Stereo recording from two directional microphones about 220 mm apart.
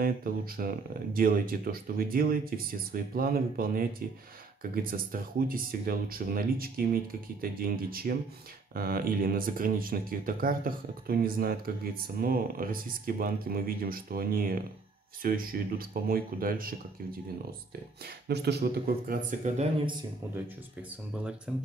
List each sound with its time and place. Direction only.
0.0 s speech: 40° right (ahead or behind)
21.2 s speech: 5° right (ahead or behind)